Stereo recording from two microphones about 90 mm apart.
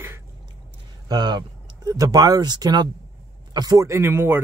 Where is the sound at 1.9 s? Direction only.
40° right (ahead or behind).